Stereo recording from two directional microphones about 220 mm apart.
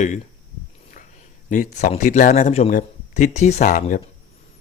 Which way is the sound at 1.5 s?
35° left (ahead or behind).